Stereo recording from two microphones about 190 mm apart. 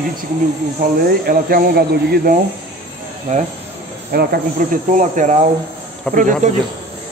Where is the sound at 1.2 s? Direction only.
50° right (ahead or behind).